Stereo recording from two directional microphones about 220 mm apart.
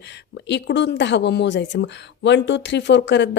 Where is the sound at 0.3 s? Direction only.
55° left (ahead or behind).